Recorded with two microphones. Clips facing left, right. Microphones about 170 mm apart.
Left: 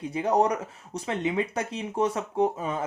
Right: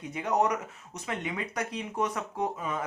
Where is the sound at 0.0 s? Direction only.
30° left (ahead or behind).